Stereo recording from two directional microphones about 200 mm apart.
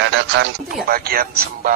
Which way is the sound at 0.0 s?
65° right (ahead or behind).